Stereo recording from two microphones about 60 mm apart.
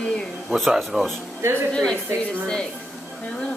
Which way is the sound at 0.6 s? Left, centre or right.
Centre.